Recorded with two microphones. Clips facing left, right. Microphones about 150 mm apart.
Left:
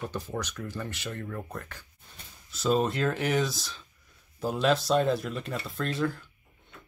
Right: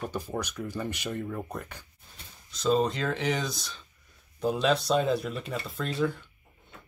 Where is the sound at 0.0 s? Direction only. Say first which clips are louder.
Right 1 dB; 10° right (ahead or behind).